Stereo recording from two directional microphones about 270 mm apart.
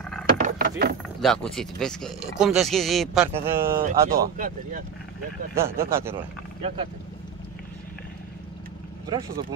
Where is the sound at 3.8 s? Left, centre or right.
Right.